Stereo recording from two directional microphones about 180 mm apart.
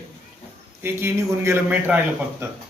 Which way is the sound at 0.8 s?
15° right (ahead or behind).